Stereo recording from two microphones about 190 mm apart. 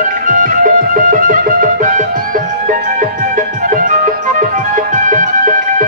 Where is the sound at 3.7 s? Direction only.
45° right (ahead or behind).